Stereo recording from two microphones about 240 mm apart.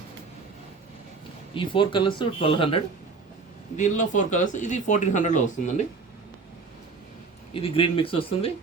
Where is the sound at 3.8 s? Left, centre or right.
Left.